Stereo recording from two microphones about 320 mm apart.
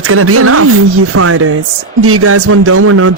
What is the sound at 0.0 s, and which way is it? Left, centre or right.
Speech, right.